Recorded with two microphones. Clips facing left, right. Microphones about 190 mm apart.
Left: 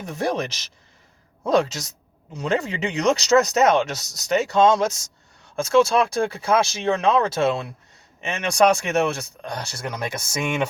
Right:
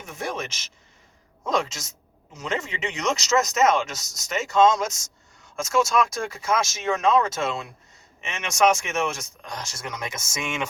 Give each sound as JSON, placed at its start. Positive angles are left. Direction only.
{"t": 0.0, "sound": "speech", "side_deg": 35}
{"t": 10.4, "sound": "speech", "side_deg": 60}